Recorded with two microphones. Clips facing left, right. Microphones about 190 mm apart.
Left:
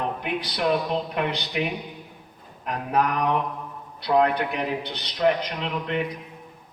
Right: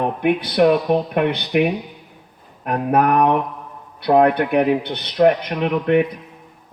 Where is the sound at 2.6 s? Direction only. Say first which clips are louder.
Right 7 dB; 55° right (ahead or behind).